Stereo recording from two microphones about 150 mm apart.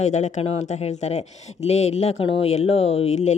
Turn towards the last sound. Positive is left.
turn(degrees=50)  # may be behind; listen again after turning